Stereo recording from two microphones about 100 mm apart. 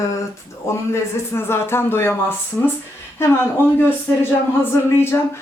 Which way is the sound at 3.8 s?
20° left (ahead or behind).